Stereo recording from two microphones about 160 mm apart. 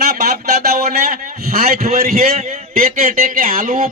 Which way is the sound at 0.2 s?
70° right (ahead or behind).